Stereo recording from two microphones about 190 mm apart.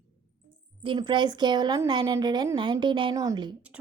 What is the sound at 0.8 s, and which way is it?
Speech, 25° right (ahead or behind).